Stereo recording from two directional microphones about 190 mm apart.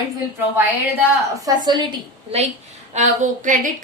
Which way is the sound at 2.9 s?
40° right (ahead or behind).